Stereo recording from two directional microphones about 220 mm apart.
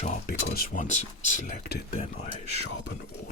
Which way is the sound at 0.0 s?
35° left (ahead or behind).